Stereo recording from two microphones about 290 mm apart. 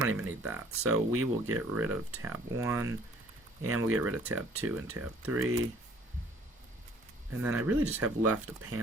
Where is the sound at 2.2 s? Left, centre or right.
Centre.